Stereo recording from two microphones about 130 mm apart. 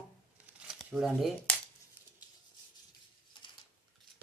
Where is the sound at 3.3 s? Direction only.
35° left (ahead or behind).